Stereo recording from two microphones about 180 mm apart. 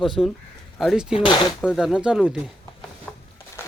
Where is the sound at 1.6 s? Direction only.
5° right (ahead or behind).